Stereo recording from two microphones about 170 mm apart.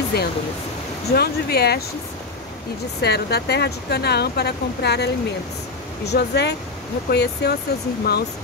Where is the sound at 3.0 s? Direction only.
70° left (ahead or behind).